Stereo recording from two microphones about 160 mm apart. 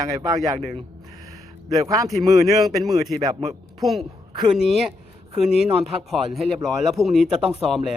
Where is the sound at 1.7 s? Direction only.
20° right (ahead or behind).